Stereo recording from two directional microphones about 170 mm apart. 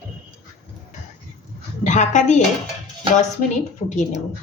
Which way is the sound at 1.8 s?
45° left (ahead or behind).